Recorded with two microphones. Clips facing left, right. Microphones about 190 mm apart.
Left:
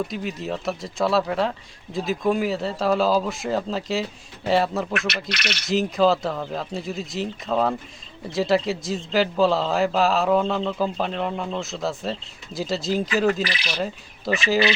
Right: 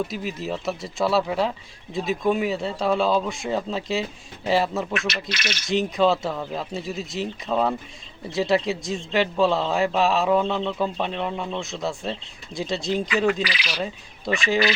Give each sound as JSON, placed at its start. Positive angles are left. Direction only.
{"t": 0.1, "sound": "speech", "side_deg": 0}
{"t": 5.3, "sound": "speech", "side_deg": 65}
{"t": 5.6, "sound": "speech", "side_deg": 0}
{"t": 14.3, "sound": "speech", "side_deg": 0}